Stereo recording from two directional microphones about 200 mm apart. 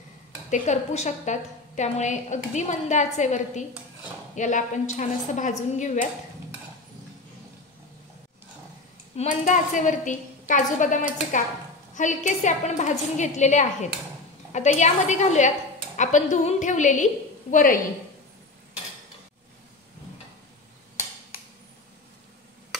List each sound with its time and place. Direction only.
0.5 s a woman's voice: 35° left (ahead or behind)
9.1 s a woman's voice: 35° left (ahead or behind)